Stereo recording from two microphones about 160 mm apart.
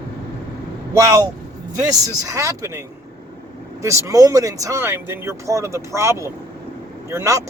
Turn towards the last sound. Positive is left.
turn(degrees=-20)  # may be behind; listen again after turning